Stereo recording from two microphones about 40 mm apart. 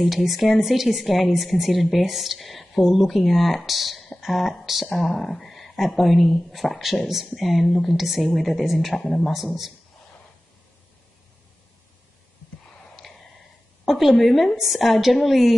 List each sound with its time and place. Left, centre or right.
0.0 s speech: centre
9.3 s speech: centre
13.0 s a sound: centre
13.8 s speech: centre